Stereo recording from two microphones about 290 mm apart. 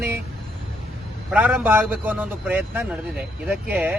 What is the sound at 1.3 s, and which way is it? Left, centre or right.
Speech, centre.